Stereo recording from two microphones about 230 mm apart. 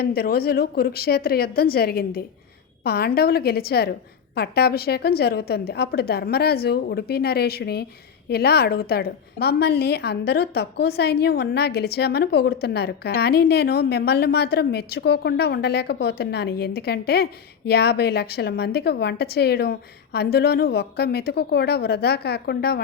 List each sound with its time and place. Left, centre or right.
0.0 s a woman's voice: left